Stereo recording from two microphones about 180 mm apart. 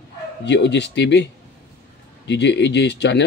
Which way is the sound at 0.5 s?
75° left (ahead or behind).